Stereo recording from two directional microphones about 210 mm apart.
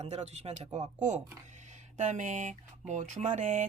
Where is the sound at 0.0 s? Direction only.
30° right (ahead or behind).